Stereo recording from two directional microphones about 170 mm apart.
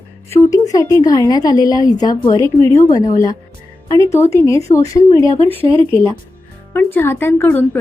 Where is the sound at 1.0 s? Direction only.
20° left (ahead or behind).